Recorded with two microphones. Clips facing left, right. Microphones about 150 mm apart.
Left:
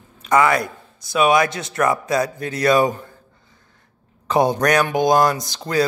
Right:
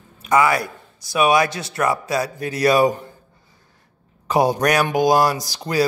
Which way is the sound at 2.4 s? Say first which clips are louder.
Right 2 dB; 15° right (ahead or behind).